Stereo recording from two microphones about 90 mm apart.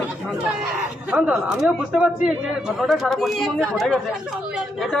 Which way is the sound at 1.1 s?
15° right (ahead or behind).